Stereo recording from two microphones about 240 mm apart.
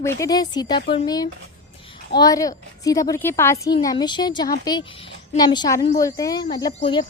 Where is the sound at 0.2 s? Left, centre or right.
Centre.